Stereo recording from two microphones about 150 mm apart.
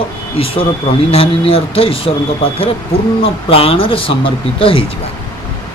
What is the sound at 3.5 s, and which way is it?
Speech, 40° left (ahead or behind).